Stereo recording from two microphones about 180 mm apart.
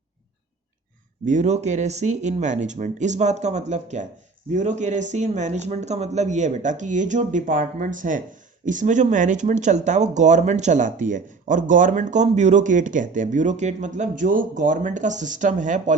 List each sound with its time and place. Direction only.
1.2 s speech: 45° right (ahead or behind)